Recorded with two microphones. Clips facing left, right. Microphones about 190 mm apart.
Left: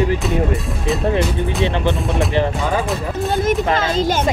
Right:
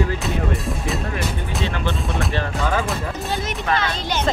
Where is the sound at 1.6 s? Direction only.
20° left (ahead or behind).